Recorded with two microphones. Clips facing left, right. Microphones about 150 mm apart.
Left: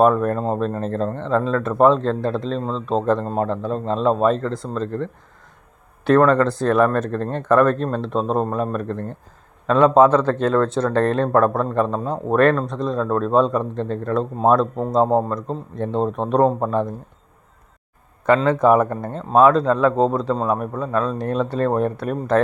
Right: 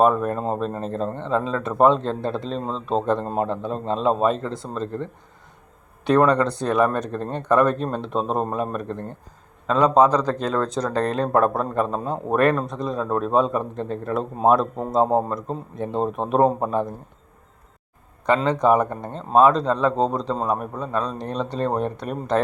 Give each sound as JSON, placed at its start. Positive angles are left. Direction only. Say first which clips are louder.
{"t": 0.0, "sound": "a man's voice", "louder": "left 3 dB", "side_deg": -5}
{"t": 6.1, "sound": "a man's voice", "louder": "left 3 dB", "side_deg": 0}
{"t": 10.8, "sound": "a man's voice", "louder": "left 4 dB", "side_deg": -15}
{"t": 11.5, "sound": "a man's voice", "louder": "left 3 dB", "side_deg": -5}
{"t": 13.1, "sound": "a man's voice", "louder": "left 2 dB", "side_deg": -15}
{"t": 18.4, "sound": "a man's voice", "louder": "left 2 dB", "side_deg": 5}